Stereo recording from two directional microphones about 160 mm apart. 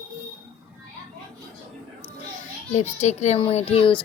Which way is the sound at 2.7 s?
45° left (ahead or behind).